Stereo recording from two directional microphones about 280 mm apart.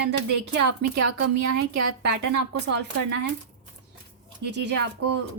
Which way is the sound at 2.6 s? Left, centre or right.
Right.